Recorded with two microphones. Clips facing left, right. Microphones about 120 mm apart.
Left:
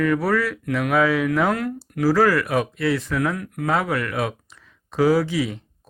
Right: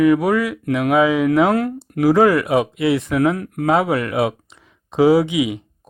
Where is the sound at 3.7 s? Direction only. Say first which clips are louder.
Right 5 dB; 25° right (ahead or behind).